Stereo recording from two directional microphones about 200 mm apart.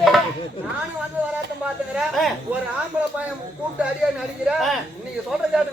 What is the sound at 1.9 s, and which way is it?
Speech, centre (ahead or behind).